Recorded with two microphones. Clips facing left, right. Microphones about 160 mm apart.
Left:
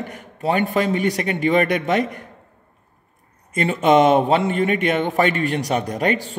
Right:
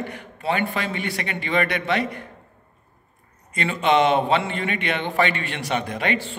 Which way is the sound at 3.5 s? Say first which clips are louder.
Left 4 dB; 45° left (ahead or behind).